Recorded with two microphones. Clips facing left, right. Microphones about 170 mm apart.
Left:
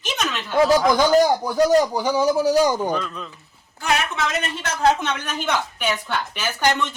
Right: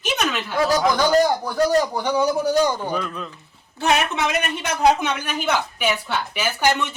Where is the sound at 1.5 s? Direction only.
10° left (ahead or behind).